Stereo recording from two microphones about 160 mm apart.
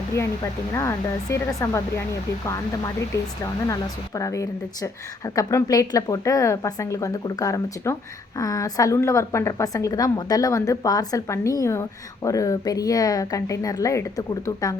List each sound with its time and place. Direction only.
0.7 s speech: 15° left (ahead or behind)
3.4 s a woman's voice: 20° left (ahead or behind)